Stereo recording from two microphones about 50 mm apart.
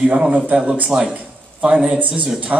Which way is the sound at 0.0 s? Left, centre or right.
Right.